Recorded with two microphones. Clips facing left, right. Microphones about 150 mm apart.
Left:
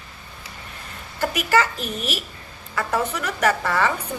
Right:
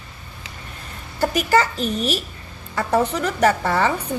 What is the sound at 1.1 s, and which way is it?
A woman's voice, 35° right (ahead or behind).